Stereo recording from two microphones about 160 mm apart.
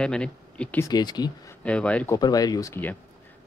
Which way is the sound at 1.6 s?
10° left (ahead or behind).